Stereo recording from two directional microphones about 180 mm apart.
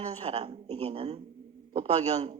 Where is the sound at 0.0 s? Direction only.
35° right (ahead or behind).